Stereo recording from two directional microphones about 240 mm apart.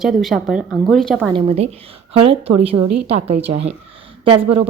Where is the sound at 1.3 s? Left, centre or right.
Right.